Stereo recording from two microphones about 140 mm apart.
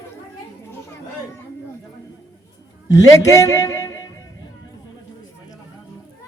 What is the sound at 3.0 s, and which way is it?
A man's voice, 20° left (ahead or behind).